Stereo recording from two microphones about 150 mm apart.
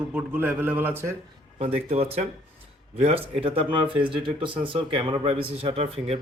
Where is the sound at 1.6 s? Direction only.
40° right (ahead or behind).